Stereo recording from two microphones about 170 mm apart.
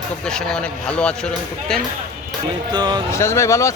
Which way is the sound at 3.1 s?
15° left (ahead or behind).